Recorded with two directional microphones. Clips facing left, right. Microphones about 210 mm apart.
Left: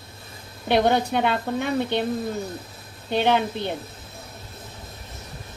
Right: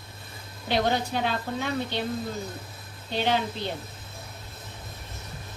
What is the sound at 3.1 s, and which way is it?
Speech, 60° left (ahead or behind).